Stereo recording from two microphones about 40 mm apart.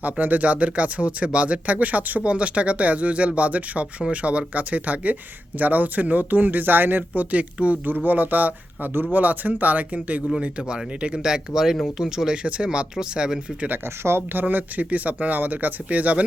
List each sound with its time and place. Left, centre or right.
0.0 s speech: right
2.2 s speech: right
7.1 s speech: right
8.0 s speech: right
11.2 s speech: centre
13.8 s speech: right
14.3 s speech: right